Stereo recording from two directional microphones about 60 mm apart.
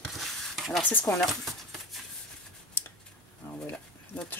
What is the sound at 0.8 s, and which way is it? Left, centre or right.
Speech, left.